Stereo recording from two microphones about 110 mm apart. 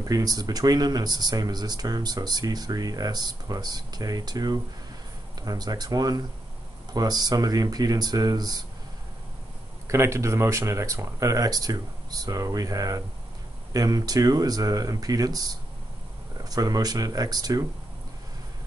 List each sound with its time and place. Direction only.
0.1 s speech: 35° right (ahead or behind)
9.8 s speech: 25° right (ahead or behind)
16.4 s speech: 35° right (ahead or behind)